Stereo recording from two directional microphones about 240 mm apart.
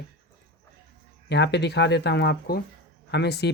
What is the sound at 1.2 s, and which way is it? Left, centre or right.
Speech, left.